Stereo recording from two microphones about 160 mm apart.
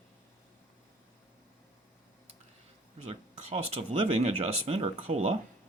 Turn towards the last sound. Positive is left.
turn(degrees=-40)  # may be behind; listen again after turning